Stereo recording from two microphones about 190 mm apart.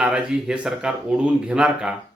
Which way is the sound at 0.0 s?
5° right (ahead or behind).